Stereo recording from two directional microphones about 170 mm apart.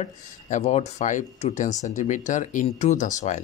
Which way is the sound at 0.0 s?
45° left (ahead or behind).